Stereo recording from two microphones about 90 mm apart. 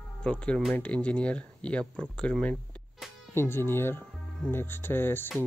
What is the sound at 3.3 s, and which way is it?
Speech, 25° left (ahead or behind).